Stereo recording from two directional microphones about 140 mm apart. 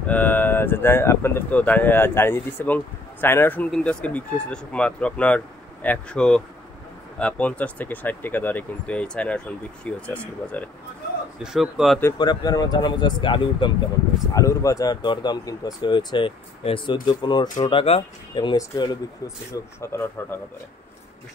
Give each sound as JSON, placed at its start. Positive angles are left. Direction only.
{"t": 0.0, "sound": "speech", "side_deg": 10}
{"t": 11.4, "sound": "speech", "side_deg": -5}
{"t": 12.2, "sound": "speech", "side_deg": 30}
{"t": 14.3, "sound": "speech", "side_deg": 25}
{"t": 19.8, "sound": "speech", "side_deg": 20}